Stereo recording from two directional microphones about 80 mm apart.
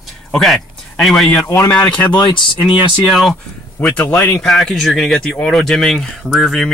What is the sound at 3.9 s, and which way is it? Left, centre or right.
Speech, left.